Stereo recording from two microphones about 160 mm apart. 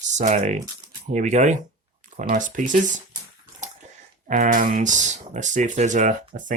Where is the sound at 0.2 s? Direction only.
45° right (ahead or behind).